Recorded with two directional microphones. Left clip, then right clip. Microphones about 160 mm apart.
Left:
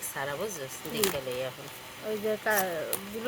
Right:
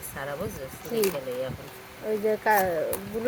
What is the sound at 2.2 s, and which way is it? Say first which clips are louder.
Speech: right 6 dB; 15° right (ahead or behind).